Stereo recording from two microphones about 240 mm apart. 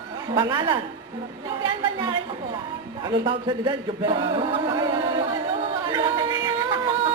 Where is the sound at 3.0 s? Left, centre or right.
Centre.